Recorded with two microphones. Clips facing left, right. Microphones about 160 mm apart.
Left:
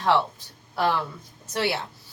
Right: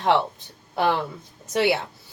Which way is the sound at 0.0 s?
20° right (ahead or behind).